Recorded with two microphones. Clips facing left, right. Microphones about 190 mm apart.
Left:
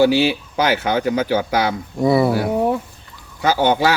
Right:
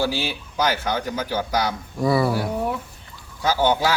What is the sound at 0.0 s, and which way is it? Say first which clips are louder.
Speech: left 10 dB; 65° left (ahead or behind).